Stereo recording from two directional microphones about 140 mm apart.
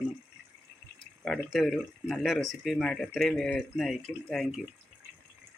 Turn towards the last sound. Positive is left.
turn(degrees=0)  # may be behind; listen again after turning